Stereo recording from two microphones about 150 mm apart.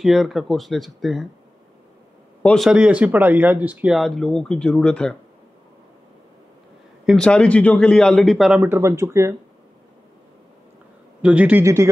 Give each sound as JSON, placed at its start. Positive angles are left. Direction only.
{"t": 0.0, "sound": "speech", "side_deg": 0}
{"t": 2.4, "sound": "speech", "side_deg": 0}
{"t": 7.1, "sound": "speech", "side_deg": 5}
{"t": 8.5, "sound": "speech", "side_deg": -15}
{"t": 11.2, "sound": "speech", "side_deg": -10}